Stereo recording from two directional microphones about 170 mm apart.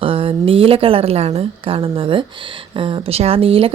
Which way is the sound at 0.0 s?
35° right (ahead or behind).